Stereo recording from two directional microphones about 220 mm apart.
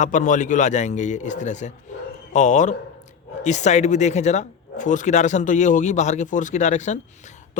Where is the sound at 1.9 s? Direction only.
35° left (ahead or behind).